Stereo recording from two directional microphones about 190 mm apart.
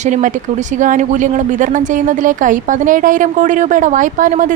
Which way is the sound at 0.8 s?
40° right (ahead or behind).